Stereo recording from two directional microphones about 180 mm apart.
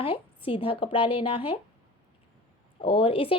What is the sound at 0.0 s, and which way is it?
A woman's voice, 30° left (ahead or behind).